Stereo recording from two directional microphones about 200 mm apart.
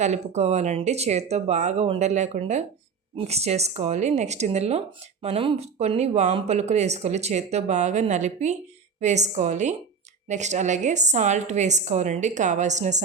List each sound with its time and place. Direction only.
0.0 s speech: 35° right (ahead or behind)